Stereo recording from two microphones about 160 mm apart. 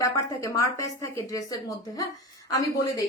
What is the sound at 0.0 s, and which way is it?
A woman's voice, 20° left (ahead or behind).